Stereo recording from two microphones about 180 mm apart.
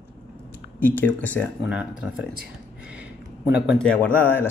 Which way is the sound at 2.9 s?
5° right (ahead or behind).